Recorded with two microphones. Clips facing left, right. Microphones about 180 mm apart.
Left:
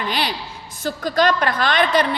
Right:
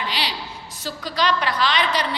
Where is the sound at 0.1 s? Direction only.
50° left (ahead or behind).